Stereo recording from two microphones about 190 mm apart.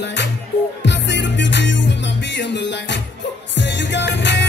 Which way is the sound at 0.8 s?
70° left (ahead or behind).